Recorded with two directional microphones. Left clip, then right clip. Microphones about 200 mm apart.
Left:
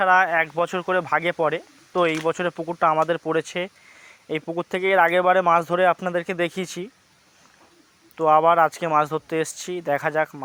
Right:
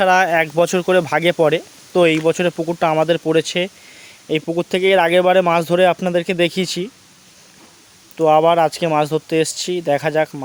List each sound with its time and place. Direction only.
0.0 s speech: 20° right (ahead or behind); by 6.8 s 5° right (ahead or behind)
8.1 s speech: centre (ahead or behind)